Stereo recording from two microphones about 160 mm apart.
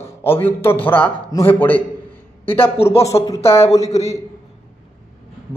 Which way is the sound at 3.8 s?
40° left (ahead or behind).